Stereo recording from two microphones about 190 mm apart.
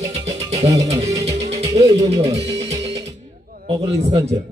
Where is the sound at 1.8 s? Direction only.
35° right (ahead or behind).